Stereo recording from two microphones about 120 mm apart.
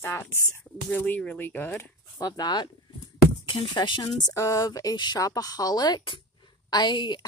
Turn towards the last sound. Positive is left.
turn(degrees=40)  # may be behind; listen again after turning